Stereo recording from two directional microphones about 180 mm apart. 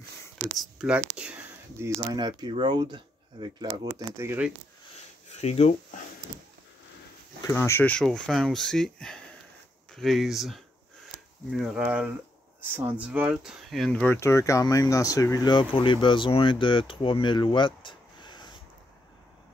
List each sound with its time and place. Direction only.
0.6 s speech: 5° right (ahead or behind)
2.1 s speech: 25° right (ahead or behind)
5.3 s speech: 35° left (ahead or behind)
7.4 s speech: 15° left (ahead or behind)